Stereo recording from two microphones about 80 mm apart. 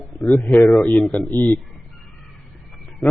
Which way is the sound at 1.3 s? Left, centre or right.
Right.